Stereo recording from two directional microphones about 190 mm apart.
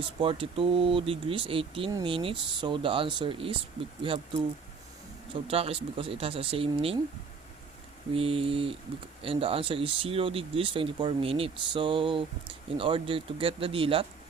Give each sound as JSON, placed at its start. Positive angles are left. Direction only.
{"t": 0.2, "sound": "speech", "side_deg": -30}
{"t": 8.1, "sound": "a sound", "side_deg": -30}
{"t": 9.2, "sound": "speech", "side_deg": -30}